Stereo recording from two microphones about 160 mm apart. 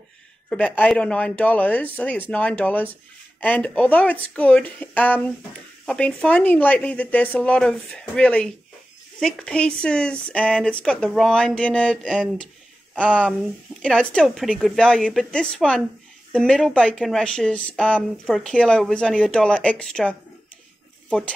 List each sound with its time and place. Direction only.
0.5 s speech: 10° left (ahead or behind)
12.9 s speech: 5° left (ahead or behind)